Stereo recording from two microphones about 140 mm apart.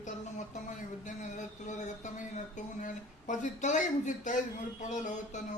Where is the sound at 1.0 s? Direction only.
60° left (ahead or behind).